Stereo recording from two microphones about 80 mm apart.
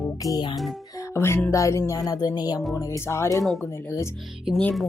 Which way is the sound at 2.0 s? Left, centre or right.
Left.